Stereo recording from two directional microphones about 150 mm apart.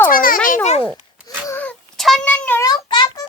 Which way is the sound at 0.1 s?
70° left (ahead or behind).